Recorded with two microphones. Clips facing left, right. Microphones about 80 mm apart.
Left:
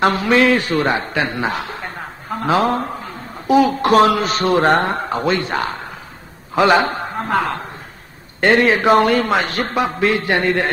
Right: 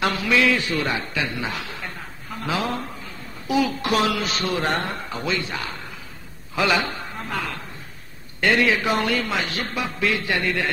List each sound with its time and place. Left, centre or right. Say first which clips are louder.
0.0 s a man's voice: left 6 dB; left